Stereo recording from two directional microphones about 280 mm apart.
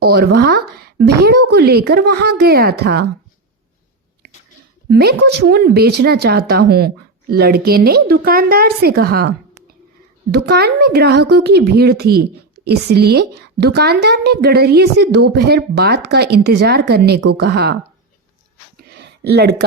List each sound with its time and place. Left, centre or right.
0.0 s a woman's voice: right
4.9 s a woman's voice: right
10.3 s a woman's voice: right
18.8 s a sound: right